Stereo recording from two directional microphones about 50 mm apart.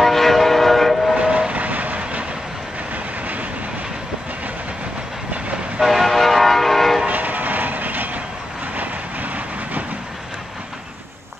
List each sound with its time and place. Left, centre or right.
0.0 s train: centre
1.1 s train: right
5.8 s vehicle: centre
7.1 s vehicle: right
8.7 s train: right